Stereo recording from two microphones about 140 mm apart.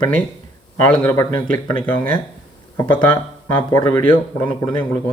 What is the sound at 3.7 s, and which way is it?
Speech, 20° left (ahead or behind).